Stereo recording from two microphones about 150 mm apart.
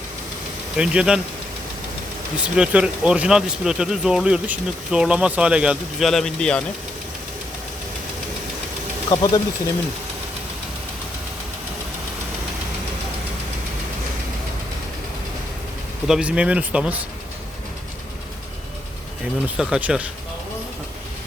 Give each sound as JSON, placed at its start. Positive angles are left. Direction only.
{"t": 0.8, "sound": "speech", "side_deg": -5}
{"t": 2.4, "sound": "speech", "side_deg": -5}
{"t": 9.0, "sound": "speech", "side_deg": 30}
{"t": 16.0, "sound": "speech", "side_deg": -5}
{"t": 19.5, "sound": "speech", "side_deg": -5}